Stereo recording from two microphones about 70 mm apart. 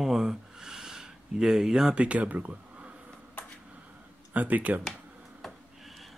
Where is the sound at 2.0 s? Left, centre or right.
Centre.